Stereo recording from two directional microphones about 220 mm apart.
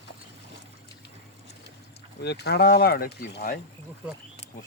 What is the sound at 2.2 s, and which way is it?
Speech, 50° left (ahead or behind).